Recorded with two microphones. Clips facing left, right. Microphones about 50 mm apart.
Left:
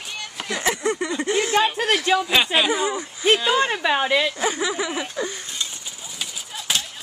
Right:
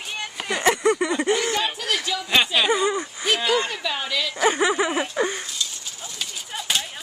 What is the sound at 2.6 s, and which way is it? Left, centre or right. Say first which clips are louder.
Speech: right 1 dB; centre.